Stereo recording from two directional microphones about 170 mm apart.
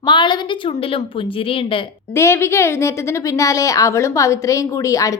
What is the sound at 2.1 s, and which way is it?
A woman's voice, 15° left (ahead or behind).